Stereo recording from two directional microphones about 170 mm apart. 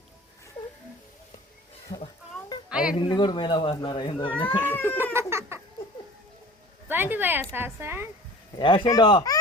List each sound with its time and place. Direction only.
2.6 s music: 5° right (ahead or behind)
3.0 s speech: 25° left (ahead or behind)
4.3 s cat: 10° left (ahead or behind)
5.1 s a sound: 15° right (ahead or behind)
6.8 s a woman's voice: 10° right (ahead or behind)
8.5 s speech: 30° left (ahead or behind)